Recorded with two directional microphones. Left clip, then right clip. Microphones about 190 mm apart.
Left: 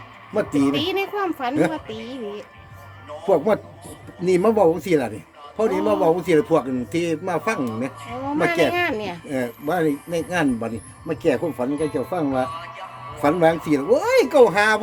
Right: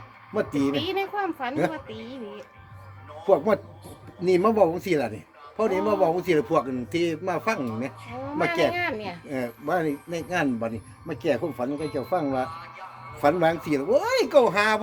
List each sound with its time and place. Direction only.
0.3 s a man's voice: 5° right (ahead or behind)
0.7 s speech: 60° left (ahead or behind)
3.2 s a man's voice: 5° right (ahead or behind)
8.7 s speech: 60° left (ahead or behind)
9.3 s a man's voice: 5° right (ahead or behind)